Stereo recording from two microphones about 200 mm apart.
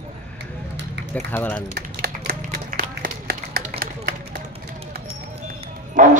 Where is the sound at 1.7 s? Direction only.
45° right (ahead or behind).